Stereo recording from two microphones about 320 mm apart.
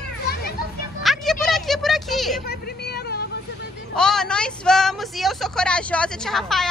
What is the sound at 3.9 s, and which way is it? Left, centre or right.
Speech, centre.